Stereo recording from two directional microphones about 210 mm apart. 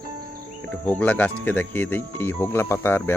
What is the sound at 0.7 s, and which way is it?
Speech, 5° left (ahead or behind).